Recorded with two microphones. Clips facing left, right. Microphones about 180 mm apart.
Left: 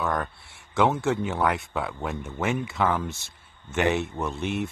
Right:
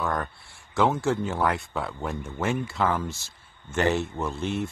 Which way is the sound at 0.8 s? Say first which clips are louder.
Even; centre (ahead or behind).